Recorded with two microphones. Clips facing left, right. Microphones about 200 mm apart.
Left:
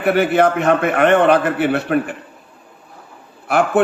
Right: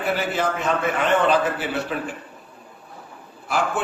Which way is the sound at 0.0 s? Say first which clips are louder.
Left 9 dB; 65° left (ahead or behind).